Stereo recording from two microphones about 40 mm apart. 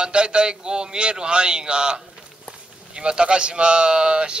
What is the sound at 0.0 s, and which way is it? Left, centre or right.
Speech, right.